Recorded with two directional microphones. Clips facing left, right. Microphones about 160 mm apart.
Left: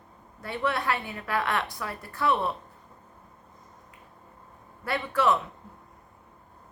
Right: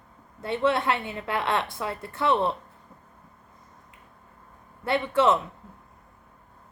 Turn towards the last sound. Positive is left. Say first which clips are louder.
# right 3 dB
turn(degrees=-25)  # may be behind; listen again after turning